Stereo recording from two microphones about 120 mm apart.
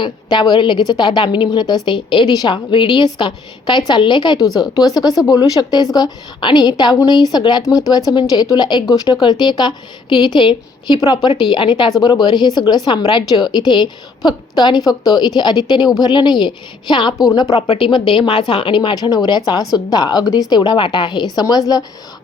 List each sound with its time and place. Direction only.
0.0 s a woman's voice: 35° left (ahead or behind)
17.7 s a woman's voice: 45° left (ahead or behind)